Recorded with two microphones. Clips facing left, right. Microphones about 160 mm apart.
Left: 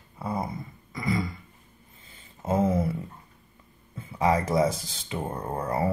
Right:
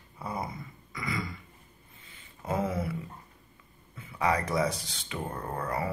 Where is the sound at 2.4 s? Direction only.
25° left (ahead or behind).